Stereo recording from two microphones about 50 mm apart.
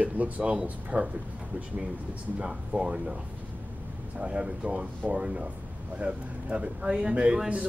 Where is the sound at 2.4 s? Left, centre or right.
Centre.